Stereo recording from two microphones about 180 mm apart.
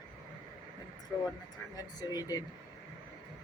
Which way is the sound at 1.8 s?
20° left (ahead or behind).